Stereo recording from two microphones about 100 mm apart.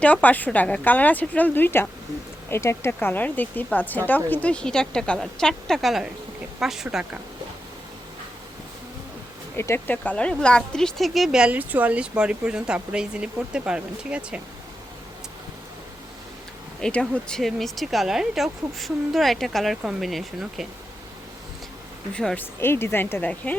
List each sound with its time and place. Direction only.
0.0 s speech: 15° left (ahead or behind); by 7.2 s 5° right (ahead or behind)
9.6 s speech: 25° left (ahead or behind); by 14.4 s 10° right (ahead or behind)
16.8 s speech: 10° left (ahead or behind)
22.1 s speech: 5° left (ahead or behind)
22.4 s speech: 25° left (ahead or behind)